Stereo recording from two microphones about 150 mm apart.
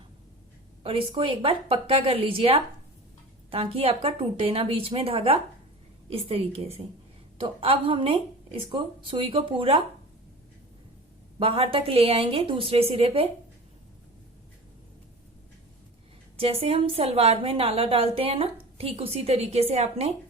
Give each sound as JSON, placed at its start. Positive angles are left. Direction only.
{"t": 0.8, "sound": "a woman's voice", "side_deg": -35}
{"t": 11.3, "sound": "a woman's voice", "side_deg": -40}
{"t": 16.4, "sound": "a woman's voice", "side_deg": -40}